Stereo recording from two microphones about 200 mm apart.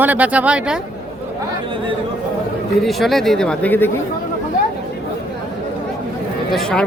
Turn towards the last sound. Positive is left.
turn(degrees=5)  # may be behind; listen again after turning